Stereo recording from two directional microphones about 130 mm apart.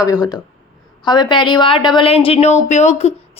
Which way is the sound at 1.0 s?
35° left (ahead or behind).